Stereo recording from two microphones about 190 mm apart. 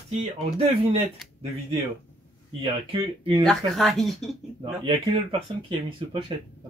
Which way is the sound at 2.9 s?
25° right (ahead or behind).